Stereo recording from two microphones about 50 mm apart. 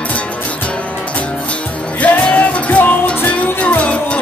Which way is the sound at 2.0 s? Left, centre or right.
Left.